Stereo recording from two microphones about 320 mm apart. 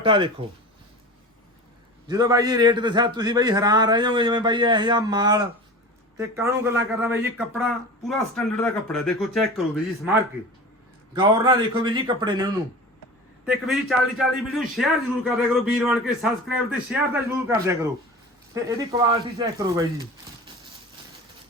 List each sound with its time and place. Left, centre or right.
0.0 s a man's voice: centre
2.0 s a man's voice: centre
11.1 s a man's voice: centre
13.4 s a man's voice: centre